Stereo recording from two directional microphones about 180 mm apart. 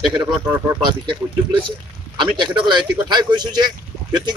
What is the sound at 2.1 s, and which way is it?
Speech, 25° right (ahead or behind).